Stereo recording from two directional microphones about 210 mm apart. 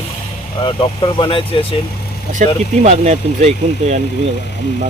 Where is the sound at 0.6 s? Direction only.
25° left (ahead or behind).